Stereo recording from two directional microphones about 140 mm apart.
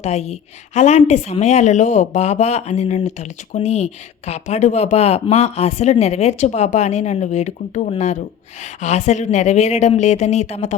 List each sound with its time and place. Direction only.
0.0 s speech: 50° left (ahead or behind)